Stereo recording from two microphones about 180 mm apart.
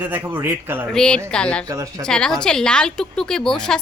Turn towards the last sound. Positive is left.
turn(degrees=5)  # may be behind; listen again after turning